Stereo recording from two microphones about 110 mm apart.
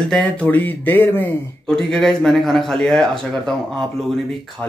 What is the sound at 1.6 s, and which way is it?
Speech, 5° left (ahead or behind).